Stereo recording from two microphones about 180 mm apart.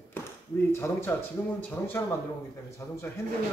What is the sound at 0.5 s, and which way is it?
Speech, 15° left (ahead or behind).